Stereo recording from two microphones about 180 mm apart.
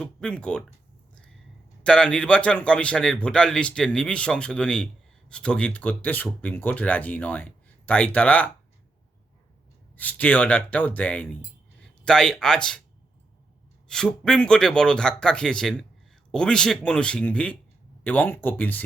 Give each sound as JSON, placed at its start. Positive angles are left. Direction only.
{"t": 0.0, "sound": "speech", "side_deg": 5}
{"t": 1.8, "sound": "speech", "side_deg": 5}
{"t": 10.0, "sound": "speech", "side_deg": 10}
{"t": 11.8, "sound": "a sound", "side_deg": 5}
{"t": 13.8, "sound": "speech", "side_deg": 5}